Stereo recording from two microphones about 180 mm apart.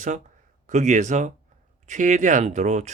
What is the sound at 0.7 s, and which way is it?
Speech, 40° right (ahead or behind).